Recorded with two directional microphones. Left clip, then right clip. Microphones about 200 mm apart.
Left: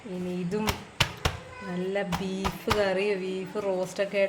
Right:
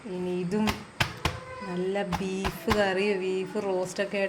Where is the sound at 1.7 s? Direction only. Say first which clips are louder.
Even; 5° left (ahead or behind).